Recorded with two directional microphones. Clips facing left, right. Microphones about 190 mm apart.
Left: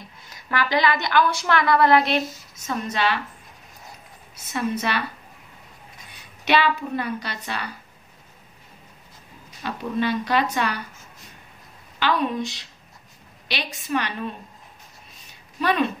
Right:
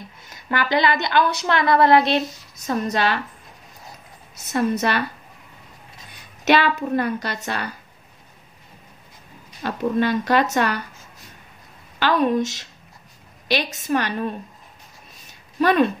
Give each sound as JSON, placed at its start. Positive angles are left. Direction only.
{"t": 0.3, "sound": "a woman's voice", "side_deg": -25}
{"t": 4.5, "sound": "a woman's voice", "side_deg": -40}
{"t": 6.4, "sound": "a woman's voice", "side_deg": -45}
{"t": 9.6, "sound": "a woman's voice", "side_deg": -45}
{"t": 12.0, "sound": "a woman's voice", "side_deg": -45}